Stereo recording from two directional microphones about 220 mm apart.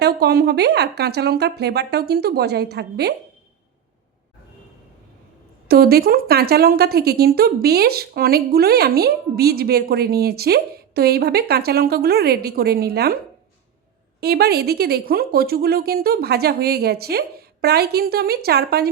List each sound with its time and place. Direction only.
0.0 s a woman's voice: 45° right (ahead or behind)
5.6 s a woman's voice: 45° right (ahead or behind)
14.2 s a woman's voice: 45° right (ahead or behind)